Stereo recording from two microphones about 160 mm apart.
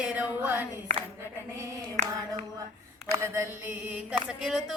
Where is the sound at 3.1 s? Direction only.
15° right (ahead or behind).